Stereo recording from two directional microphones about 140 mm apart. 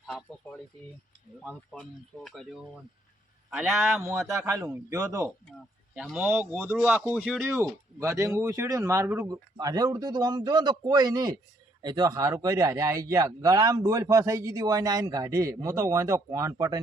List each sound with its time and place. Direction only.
1.5 s speech: 10° left (ahead or behind)
4.4 s speech: 20° right (ahead or behind)
5.9 s speech: 5° right (ahead or behind)
7.4 s speech: 20° right (ahead or behind)